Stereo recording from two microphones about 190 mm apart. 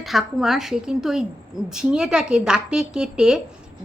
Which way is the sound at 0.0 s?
Centre (ahead or behind).